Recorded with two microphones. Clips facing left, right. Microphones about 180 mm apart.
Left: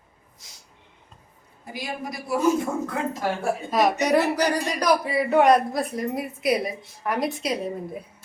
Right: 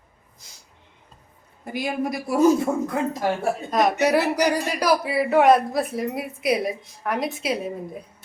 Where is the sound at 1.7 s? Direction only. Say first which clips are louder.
Right 7 dB; 55° right (ahead or behind).